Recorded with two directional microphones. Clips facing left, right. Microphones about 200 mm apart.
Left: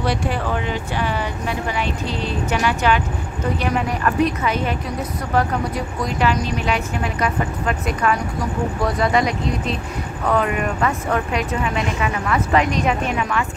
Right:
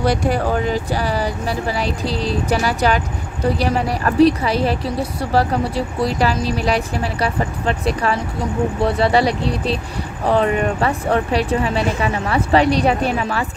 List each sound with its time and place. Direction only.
0.0 s a woman's voice: 40° right (ahead or behind)